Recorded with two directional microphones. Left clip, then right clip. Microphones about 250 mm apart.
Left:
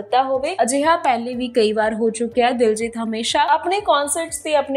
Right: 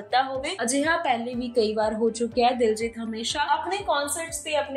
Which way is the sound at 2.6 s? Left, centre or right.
Left.